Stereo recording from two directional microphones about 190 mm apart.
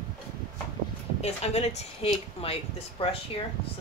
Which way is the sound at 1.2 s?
35° left (ahead or behind).